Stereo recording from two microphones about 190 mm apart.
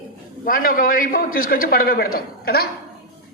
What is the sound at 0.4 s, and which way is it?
A man's voice, 50° left (ahead or behind).